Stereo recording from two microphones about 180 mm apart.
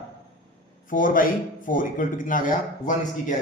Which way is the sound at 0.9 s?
50° left (ahead or behind).